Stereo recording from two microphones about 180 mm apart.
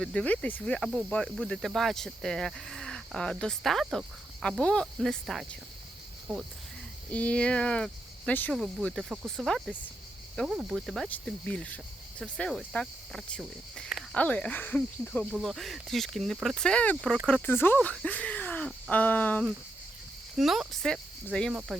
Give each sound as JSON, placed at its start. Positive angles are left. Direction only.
{"t": 0.0, "sound": "speech", "side_deg": 5}
{"t": 20.3, "sound": "speech", "side_deg": 0}